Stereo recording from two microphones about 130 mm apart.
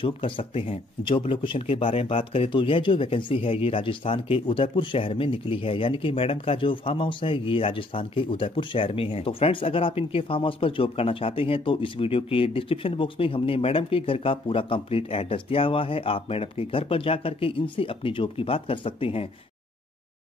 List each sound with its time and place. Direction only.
0.0 s speech: 45° left (ahead or behind)